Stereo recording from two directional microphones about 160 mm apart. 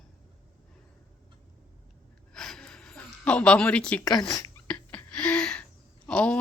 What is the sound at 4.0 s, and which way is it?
Speech, 25° left (ahead or behind).